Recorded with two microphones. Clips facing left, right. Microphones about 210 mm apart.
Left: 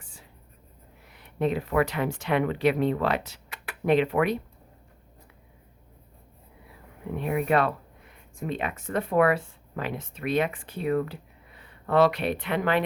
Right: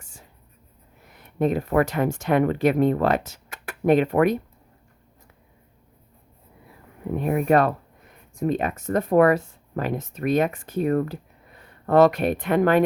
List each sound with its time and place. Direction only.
0.0 s whispering: 45° right (ahead or behind)
1.0 s speech: 45° right (ahead or behind)
7.2 s speech: 45° right (ahead or behind)